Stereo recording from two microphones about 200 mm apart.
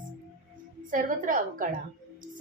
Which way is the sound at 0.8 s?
40° right (ahead or behind).